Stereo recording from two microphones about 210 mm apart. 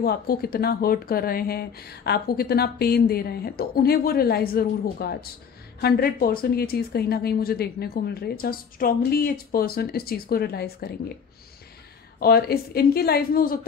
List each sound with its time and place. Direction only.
0.0 s speech: 45° left (ahead or behind)
12.2 s speech: 50° left (ahead or behind)